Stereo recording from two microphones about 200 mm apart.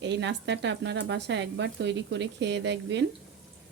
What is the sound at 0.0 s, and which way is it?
Speech, 60° right (ahead or behind).